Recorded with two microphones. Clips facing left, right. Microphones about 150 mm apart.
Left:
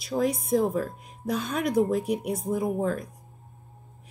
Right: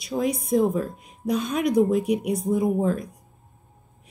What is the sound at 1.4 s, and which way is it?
Speech, 15° right (ahead or behind).